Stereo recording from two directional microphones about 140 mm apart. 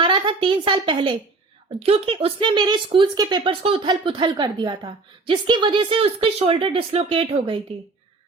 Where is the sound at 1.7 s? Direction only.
45° right (ahead or behind).